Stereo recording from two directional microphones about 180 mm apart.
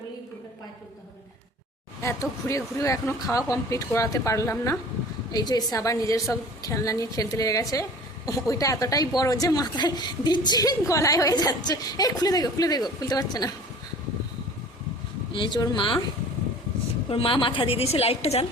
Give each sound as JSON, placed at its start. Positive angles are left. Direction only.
{"t": 2.0, "sound": "a woman's voice", "side_deg": 15}
{"t": 15.3, "sound": "a woman's voice", "side_deg": 25}
{"t": 17.1, "sound": "a woman's voice", "side_deg": 30}